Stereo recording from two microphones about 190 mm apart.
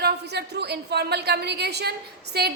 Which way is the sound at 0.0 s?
60° right (ahead or behind).